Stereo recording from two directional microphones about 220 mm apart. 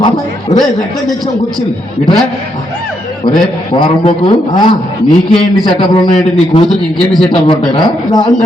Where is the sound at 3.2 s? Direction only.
20° left (ahead or behind).